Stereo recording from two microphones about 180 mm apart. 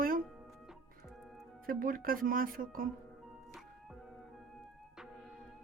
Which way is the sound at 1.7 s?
50° right (ahead or behind).